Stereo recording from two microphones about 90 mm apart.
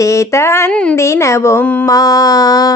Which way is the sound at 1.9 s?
45° left (ahead or behind).